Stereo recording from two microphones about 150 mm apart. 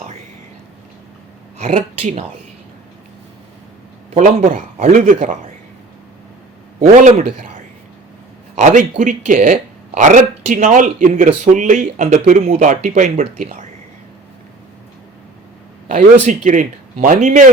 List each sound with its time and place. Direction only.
1.5 s speech: 50° right (ahead or behind)
4.1 s speech: 50° right (ahead or behind)
8.5 s speech: 55° right (ahead or behind)
15.9 s speech: 55° right (ahead or behind)